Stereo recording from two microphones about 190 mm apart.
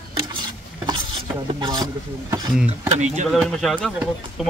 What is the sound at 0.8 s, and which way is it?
Stir, 25° right (ahead or behind).